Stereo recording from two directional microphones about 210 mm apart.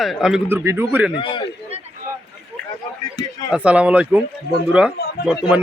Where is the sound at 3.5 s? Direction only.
5° right (ahead or behind).